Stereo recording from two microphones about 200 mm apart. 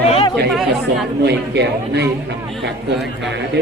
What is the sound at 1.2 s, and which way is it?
Speech, 55° right (ahead or behind).